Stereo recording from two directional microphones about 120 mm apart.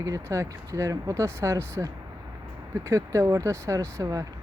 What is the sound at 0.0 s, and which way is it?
Speech, 25° right (ahead or behind).